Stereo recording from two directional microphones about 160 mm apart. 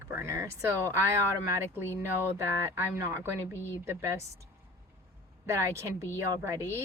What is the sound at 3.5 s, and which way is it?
Speech, 15° left (ahead or behind).